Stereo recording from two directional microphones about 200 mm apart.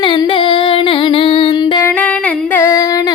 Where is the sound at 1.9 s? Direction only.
5° left (ahead or behind).